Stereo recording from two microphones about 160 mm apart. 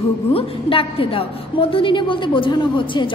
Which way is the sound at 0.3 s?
35° left (ahead or behind).